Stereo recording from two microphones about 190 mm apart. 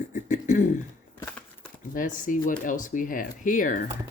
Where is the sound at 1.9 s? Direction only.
45° left (ahead or behind).